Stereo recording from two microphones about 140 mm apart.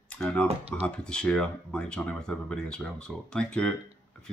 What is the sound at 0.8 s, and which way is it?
Speech, 5° left (ahead or behind).